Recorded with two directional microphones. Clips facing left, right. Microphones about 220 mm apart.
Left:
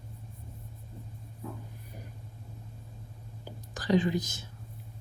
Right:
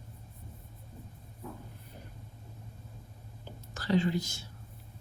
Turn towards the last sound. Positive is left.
turn(degrees=20)  # may be behind; listen again after turning